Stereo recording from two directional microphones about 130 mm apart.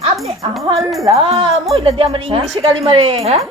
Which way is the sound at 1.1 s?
50° right (ahead or behind).